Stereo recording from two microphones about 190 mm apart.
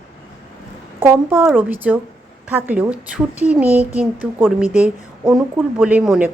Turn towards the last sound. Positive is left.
turn(degrees=-5)  # may be behind; listen again after turning